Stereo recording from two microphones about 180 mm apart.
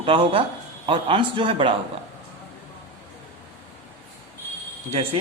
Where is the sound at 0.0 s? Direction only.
30° right (ahead or behind).